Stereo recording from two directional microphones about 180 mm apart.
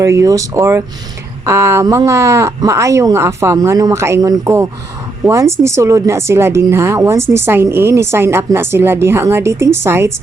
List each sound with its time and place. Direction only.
0.0 s speech: 15° right (ahead or behind)